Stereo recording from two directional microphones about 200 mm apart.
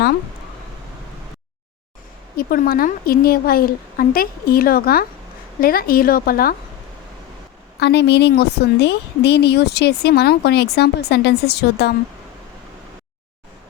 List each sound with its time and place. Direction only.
2.3 s a woman's voice: 45° left (ahead or behind)
7.8 s speech: 55° left (ahead or behind)